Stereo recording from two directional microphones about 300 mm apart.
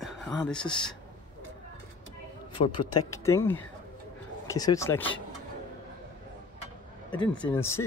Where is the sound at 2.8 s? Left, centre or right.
Left.